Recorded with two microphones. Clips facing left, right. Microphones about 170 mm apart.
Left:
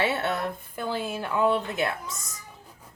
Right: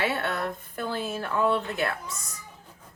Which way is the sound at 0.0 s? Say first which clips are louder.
Left 2 dB; 25° left (ahead or behind).